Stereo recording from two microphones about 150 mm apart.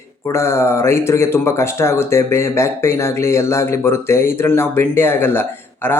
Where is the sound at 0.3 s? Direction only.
20° left (ahead or behind).